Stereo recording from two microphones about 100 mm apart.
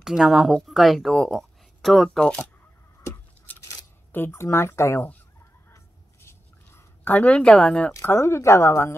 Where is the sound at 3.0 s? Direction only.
15° left (ahead or behind).